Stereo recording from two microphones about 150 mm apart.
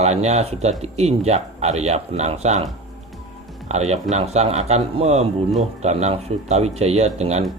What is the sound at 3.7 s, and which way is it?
Speech, 45° right (ahead or behind).